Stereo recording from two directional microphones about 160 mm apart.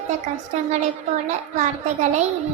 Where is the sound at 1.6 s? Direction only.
50° right (ahead or behind).